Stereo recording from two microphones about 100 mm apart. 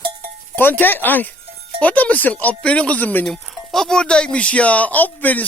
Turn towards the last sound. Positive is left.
turn(degrees=15)  # may be behind; listen again after turning